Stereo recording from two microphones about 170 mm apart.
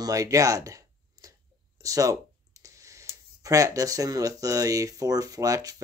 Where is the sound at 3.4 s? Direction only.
20° right (ahead or behind).